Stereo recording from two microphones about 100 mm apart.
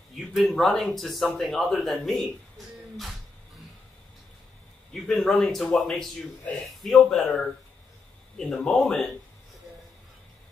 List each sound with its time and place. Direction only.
0.3 s speech: centre (ahead or behind)
4.9 s a man's voice: centre (ahead or behind)